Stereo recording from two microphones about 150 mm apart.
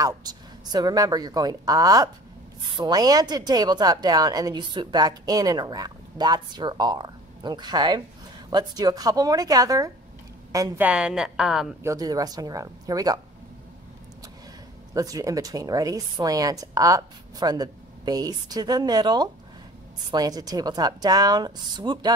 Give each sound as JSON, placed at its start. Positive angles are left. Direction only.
{"t": 0.0, "sound": "speech", "side_deg": -25}
{"t": 10.8, "sound": "a woman's voice", "side_deg": -5}
{"t": 11.8, "sound": "speech", "side_deg": -20}
{"t": 15.0, "sound": "speech", "side_deg": -25}